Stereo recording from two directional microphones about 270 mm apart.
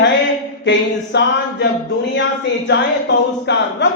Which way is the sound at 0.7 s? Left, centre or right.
Left.